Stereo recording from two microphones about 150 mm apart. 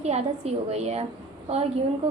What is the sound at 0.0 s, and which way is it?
A woman's voice, 45° right (ahead or behind).